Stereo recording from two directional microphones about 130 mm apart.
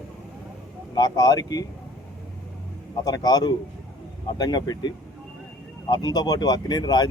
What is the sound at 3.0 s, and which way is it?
Speech, 30° left (ahead or behind).